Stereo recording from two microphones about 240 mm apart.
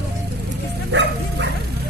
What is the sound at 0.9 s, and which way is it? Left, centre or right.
Bow-wow, right.